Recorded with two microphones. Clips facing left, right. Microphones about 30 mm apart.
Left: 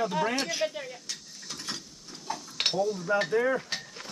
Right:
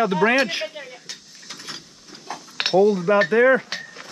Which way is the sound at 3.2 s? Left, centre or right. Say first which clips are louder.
Right 10 dB; right.